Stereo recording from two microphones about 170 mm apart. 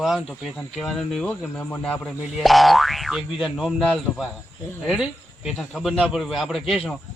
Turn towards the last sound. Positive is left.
turn(degrees=0)  # may be behind; listen again after turning